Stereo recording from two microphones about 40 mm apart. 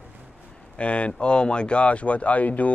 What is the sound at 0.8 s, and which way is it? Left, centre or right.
Speech, left.